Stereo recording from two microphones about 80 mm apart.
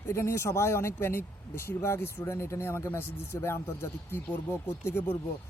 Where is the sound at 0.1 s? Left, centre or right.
Left.